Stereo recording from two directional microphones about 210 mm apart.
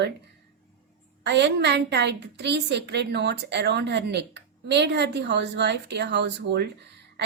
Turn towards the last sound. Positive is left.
turn(degrees=-55)  # may be behind; listen again after turning